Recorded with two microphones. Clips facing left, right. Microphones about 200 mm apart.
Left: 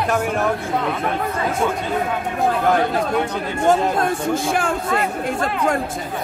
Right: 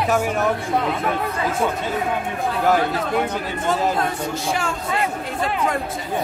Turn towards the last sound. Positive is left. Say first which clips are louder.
# left 4 dB
turn(degrees=50)  # may be behind; listen again after turning